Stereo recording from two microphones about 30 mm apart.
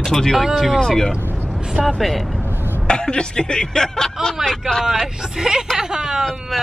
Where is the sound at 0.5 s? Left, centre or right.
Centre.